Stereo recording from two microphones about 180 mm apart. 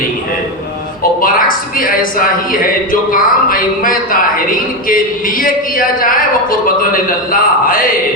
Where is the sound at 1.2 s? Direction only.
50° left (ahead or behind).